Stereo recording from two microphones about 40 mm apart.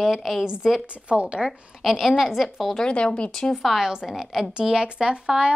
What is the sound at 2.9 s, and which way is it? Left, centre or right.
Speech, left.